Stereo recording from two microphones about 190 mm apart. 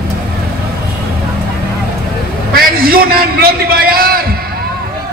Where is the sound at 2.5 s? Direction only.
50° right (ahead or behind).